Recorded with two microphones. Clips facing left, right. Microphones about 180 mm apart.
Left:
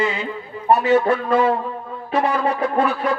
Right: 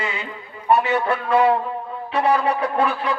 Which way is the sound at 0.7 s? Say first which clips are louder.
Left 3 dB; 35° left (ahead or behind).